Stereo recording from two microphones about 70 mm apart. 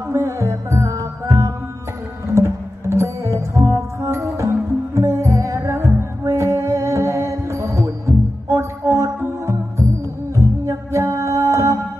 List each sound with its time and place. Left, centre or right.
0.1 s music: right